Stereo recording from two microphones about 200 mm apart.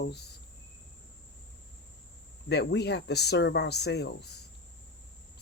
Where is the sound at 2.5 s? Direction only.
55° left (ahead or behind).